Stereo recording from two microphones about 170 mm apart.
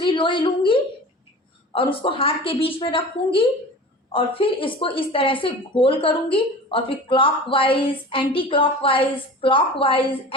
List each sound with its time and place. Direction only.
0.0 s a woman's voice: 30° left (ahead or behind)